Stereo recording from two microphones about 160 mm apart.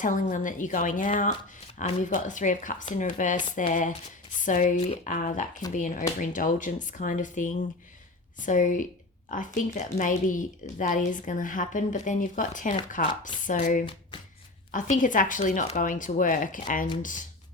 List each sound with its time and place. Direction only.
0.0 s speech: 55° left (ahead or behind)